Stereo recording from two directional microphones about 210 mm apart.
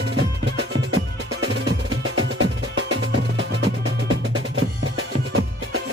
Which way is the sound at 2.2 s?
75° right (ahead or behind).